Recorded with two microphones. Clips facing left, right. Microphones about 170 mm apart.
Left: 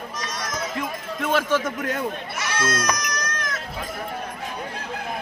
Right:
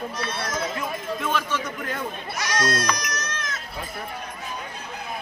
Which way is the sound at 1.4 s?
45° left (ahead or behind).